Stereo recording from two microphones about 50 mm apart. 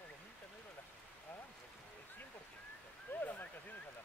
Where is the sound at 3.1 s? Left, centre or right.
Left.